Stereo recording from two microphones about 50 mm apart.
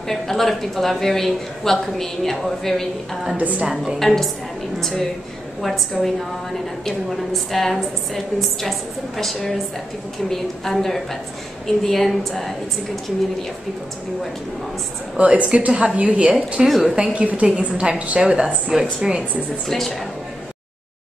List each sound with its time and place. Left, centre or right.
0.1 s speech: centre
3.3 s a woman's voice: right
3.7 s speech: centre
7.5 s speech: centre
15.1 s a woman's voice: right
16.6 s speech: centre
17.1 s a woman's voice: right
19.7 s speech: centre